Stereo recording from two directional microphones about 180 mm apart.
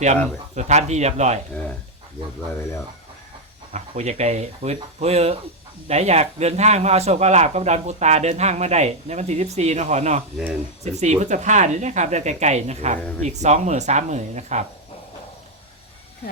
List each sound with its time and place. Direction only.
0.5 s speech: 40° right (ahead or behind)
3.7 s speech: 40° right (ahead or behind)
13.0 s speech: 5° left (ahead or behind)
13.2 s speech: 40° right (ahead or behind)